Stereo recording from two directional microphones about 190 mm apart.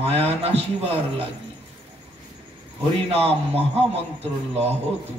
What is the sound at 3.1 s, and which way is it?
A man's voice, 30° right (ahead or behind).